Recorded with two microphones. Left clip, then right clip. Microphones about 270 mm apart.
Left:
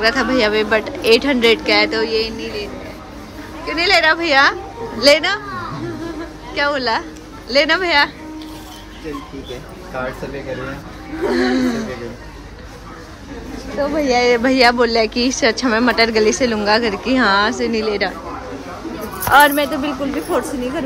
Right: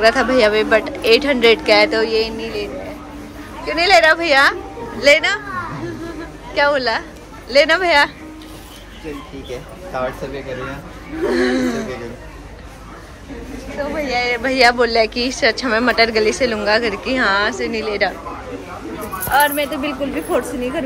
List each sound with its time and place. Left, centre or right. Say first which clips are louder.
0.0 s speech: right 3 dB; centre
6.5 s speech: right 2 dB; centre
11.2 s speech: even; centre
13.9 s speech: left 5 dB; centre
19.3 s speech: left 4 dB; left
19.6 s speech: left 1 dB; centre